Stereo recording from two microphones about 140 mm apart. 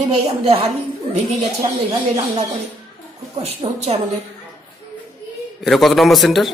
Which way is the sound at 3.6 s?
50° right (ahead or behind).